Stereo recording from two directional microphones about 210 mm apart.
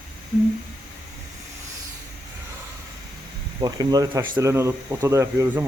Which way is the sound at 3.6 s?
20° right (ahead or behind).